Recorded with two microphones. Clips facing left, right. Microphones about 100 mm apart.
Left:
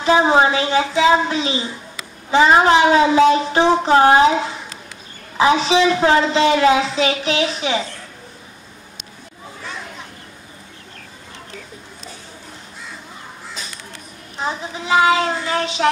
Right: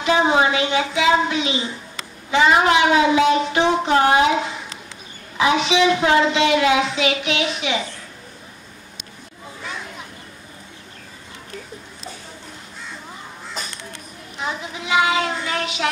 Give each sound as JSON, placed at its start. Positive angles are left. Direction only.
{"t": 0.0, "sound": "speech", "side_deg": 35}
{"t": 14.4, "sound": "speech", "side_deg": 35}